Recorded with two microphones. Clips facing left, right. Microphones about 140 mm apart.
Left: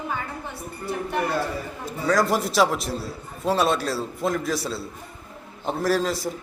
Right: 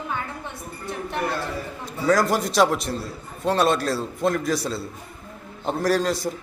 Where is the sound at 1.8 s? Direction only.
Centre (ahead or behind).